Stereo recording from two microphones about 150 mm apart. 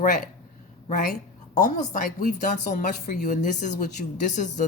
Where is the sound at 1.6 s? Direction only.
55° left (ahead or behind).